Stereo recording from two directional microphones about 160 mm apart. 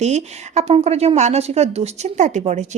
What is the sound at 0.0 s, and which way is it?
Speech, 45° right (ahead or behind).